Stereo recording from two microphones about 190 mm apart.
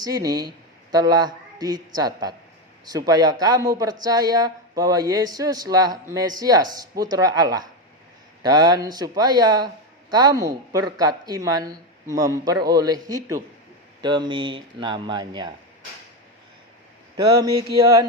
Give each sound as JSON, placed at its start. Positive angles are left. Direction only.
{"t": 0.0, "sound": "a man's voice", "side_deg": -20}